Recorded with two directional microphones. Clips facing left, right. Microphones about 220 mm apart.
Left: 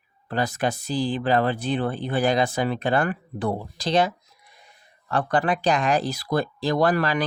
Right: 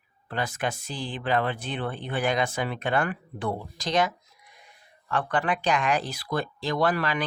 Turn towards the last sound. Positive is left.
turn(degrees=40)  # may be behind; listen again after turning